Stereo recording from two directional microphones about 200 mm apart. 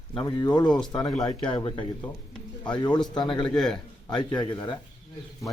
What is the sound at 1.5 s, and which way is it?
Speech, 25° left (ahead or behind).